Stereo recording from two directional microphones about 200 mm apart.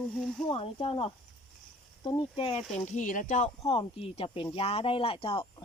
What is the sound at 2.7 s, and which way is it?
Speech, 40° left (ahead or behind).